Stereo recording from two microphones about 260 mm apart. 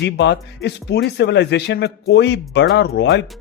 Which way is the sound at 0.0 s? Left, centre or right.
Left.